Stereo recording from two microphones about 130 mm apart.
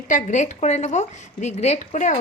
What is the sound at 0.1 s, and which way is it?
A woman's voice, 70° left (ahead or behind).